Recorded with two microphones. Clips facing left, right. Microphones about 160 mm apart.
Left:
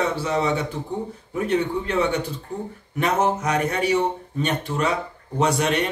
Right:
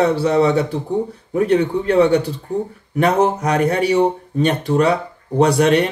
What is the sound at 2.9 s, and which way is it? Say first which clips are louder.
Speech: right 6 dB; 35° right (ahead or behind).